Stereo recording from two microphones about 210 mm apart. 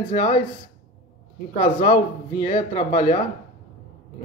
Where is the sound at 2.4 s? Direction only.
30° left (ahead or behind).